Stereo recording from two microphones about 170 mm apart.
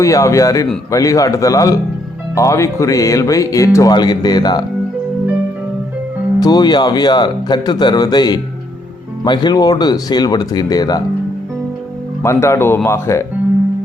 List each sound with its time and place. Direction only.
0.0 s speech: 20° left (ahead or behind)
6.4 s speech: 25° left (ahead or behind)
12.2 s speech: 15° left (ahead or behind)